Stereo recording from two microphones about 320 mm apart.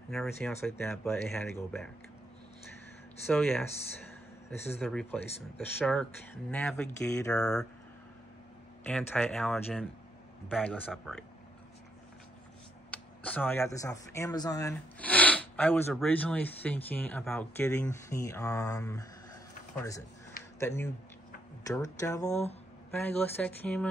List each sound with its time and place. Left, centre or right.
0.1 s speech: centre
3.3 s speech: centre
8.8 s speech: centre
12.9 s speech: centre
20.5 s speech: centre
22.9 s speech: centre